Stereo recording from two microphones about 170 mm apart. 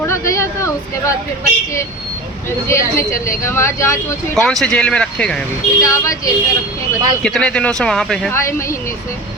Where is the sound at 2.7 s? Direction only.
15° left (ahead or behind).